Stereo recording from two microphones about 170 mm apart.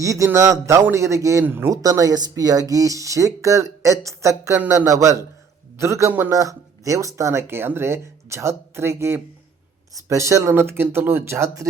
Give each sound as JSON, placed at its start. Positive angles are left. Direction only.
{"t": 0.0, "sound": "a man's voice", "side_deg": -20}